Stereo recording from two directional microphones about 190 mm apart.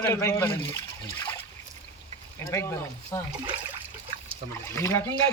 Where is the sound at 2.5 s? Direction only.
15° left (ahead or behind).